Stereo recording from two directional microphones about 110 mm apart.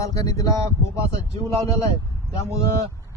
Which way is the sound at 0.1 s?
35° left (ahead or behind).